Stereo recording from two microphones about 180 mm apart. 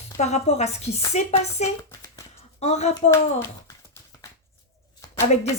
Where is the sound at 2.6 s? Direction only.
40° left (ahead or behind).